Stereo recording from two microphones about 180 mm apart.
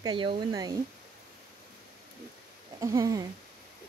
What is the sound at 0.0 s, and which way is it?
Speech, 25° right (ahead or behind).